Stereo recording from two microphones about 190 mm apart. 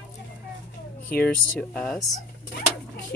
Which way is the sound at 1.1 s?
10° left (ahead or behind).